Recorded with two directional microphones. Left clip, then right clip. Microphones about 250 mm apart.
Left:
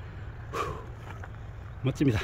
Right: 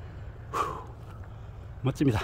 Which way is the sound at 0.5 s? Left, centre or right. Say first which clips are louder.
Right 3 dB; centre.